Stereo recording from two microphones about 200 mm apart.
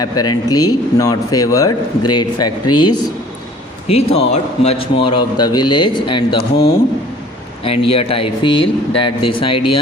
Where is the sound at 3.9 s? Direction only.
30° left (ahead or behind).